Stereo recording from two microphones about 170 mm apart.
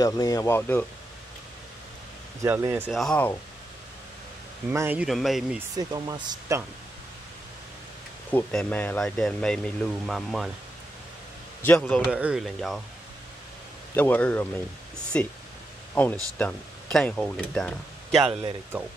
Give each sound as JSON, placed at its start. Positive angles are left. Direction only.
{"t": 0.0, "sound": "speech", "side_deg": 20}
{"t": 2.4, "sound": "speech", "side_deg": -15}
{"t": 2.9, "sound": "speech", "side_deg": 5}
{"t": 4.6, "sound": "speech", "side_deg": -10}
{"t": 5.8, "sound": "speech", "side_deg": -20}
{"t": 8.3, "sound": "speech", "side_deg": 10}
{"t": 11.6, "sound": "speech", "side_deg": 10}
{"t": 12.0, "sound": "speech", "side_deg": -5}
{"t": 13.9, "sound": "speech", "side_deg": 10}